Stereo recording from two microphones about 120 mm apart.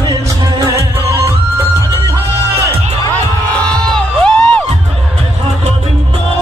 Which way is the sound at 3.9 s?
5° left (ahead or behind).